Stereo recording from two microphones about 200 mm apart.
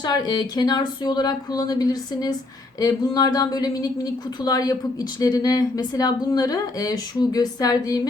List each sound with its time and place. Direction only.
0.0 s speech: 20° left (ahead or behind)